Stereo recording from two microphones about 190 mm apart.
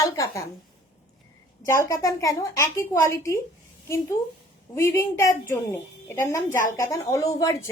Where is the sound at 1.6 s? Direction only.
15° left (ahead or behind).